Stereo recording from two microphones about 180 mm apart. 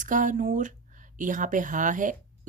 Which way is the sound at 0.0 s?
45° right (ahead or behind).